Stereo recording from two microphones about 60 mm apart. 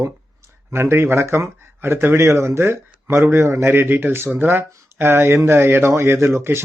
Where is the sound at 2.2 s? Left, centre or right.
Right.